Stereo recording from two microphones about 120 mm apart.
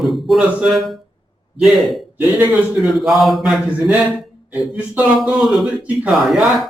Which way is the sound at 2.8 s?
Centre (ahead or behind).